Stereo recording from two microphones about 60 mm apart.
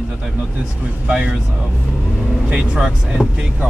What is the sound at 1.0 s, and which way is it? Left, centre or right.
Speech, centre.